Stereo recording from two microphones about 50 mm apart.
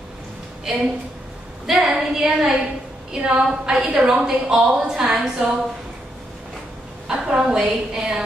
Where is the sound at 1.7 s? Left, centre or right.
Centre.